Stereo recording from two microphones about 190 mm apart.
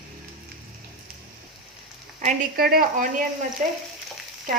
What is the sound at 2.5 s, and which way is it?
Speech, 50° right (ahead or behind).